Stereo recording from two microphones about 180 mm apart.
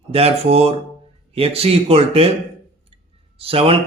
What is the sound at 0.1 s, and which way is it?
Speech, 35° right (ahead or behind).